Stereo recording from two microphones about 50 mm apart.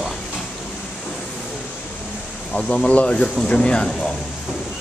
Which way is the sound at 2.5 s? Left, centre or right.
Centre.